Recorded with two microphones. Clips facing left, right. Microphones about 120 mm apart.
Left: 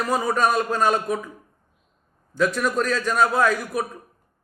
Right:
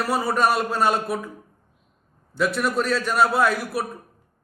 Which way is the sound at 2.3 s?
5° right (ahead or behind).